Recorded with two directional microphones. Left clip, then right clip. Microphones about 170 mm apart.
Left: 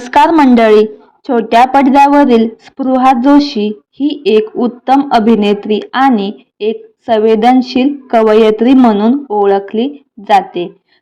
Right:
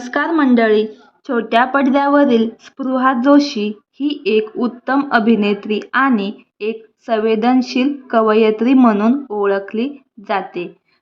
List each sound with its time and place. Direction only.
0.0 s a woman's voice: 40° left (ahead or behind); by 10.7 s 20° left (ahead or behind)